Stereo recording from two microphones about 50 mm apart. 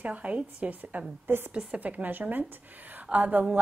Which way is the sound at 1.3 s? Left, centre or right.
Right.